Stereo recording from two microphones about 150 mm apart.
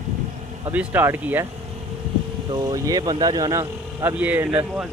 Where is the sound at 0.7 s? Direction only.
10° right (ahead or behind).